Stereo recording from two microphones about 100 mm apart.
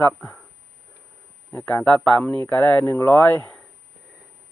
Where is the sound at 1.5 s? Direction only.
15° left (ahead or behind).